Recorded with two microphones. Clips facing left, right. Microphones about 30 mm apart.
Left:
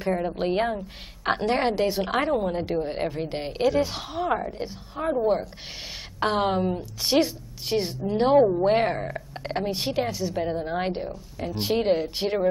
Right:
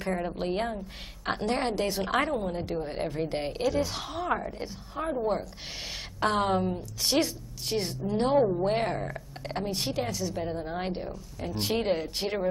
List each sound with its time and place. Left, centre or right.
0.0 s speech: centre
0.4 s a woman's voice: left
8.6 s a woman's voice: centre